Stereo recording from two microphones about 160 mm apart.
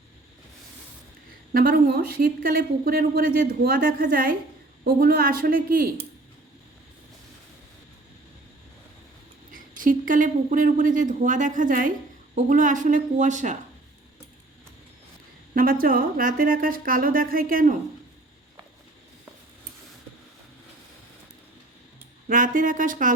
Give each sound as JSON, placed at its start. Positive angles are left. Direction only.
{"t": 1.5, "sound": "speech", "side_deg": -65}
{"t": 4.8, "sound": "speech", "side_deg": -75}
{"t": 9.5, "sound": "a woman's voice", "side_deg": -60}
{"t": 15.5, "sound": "speech", "side_deg": -60}
{"t": 22.3, "sound": "speech", "side_deg": -55}